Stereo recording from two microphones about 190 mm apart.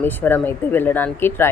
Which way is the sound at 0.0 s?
10° left (ahead or behind).